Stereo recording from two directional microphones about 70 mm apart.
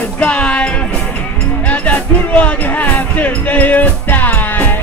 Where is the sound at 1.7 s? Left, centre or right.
Centre.